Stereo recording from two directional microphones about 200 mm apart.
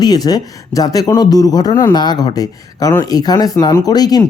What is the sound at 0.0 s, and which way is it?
Speech, 20° left (ahead or behind).